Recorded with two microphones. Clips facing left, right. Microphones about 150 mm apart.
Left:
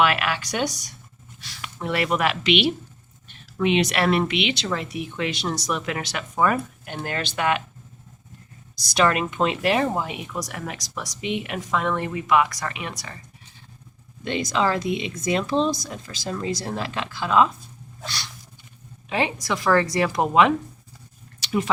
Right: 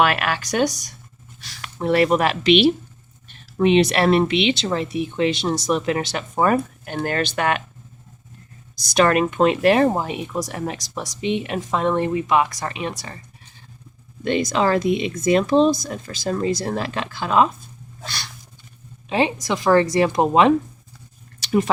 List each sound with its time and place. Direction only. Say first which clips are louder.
0.0 s speech: right 2 dB; 45° right (ahead or behind)
8.7 s speech: right 4 dB; 45° right (ahead or behind); by 13.1 s 30° right (ahead or behind)
14.3 s speech: right 4 dB; 55° right (ahead or behind)
19.0 s speech: right 4 dB; 25° right (ahead or behind)
21.4 s a sound: right 5 dB; 40° right (ahead or behind)